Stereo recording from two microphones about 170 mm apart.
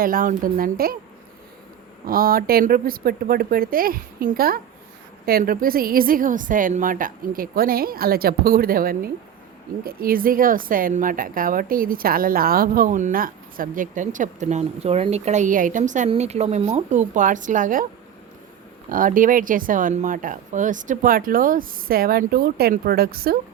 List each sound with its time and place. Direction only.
0.0 s a woman's voice: 55° right (ahead or behind)
2.0 s a woman's voice: 60° right (ahead or behind)
18.9 s a woman's voice: 55° right (ahead or behind)